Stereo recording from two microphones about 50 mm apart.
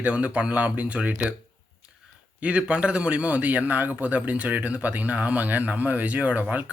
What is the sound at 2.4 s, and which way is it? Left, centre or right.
A man's voice, right.